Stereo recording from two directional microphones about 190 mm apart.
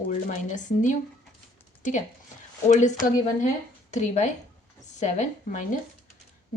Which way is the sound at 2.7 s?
40° left (ahead or behind).